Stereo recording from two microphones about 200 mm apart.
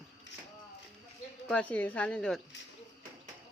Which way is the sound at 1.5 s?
5° left (ahead or behind).